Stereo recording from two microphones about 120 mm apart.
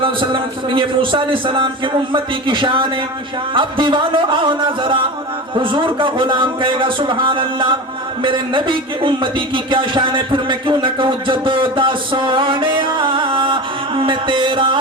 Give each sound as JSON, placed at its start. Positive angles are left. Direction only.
{"t": 0.0, "sound": "speech", "side_deg": -45}